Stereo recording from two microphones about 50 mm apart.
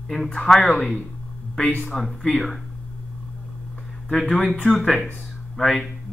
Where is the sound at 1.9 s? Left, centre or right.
Centre.